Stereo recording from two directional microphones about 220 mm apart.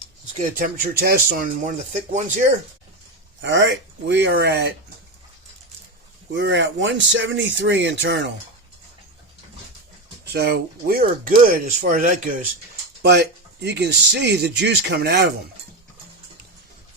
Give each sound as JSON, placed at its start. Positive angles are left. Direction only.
{"t": 0.3, "sound": "speech", "side_deg": -40}
{"t": 3.4, "sound": "speech", "side_deg": -55}
{"t": 6.3, "sound": "speech", "side_deg": -55}
{"t": 10.3, "sound": "speech", "side_deg": -45}
{"t": 13.0, "sound": "speech", "side_deg": -50}